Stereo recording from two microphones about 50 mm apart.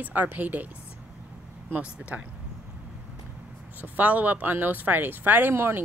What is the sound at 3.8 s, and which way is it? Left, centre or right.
Speech, right.